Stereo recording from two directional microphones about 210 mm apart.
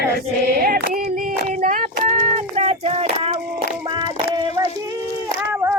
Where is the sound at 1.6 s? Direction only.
35° right (ahead or behind).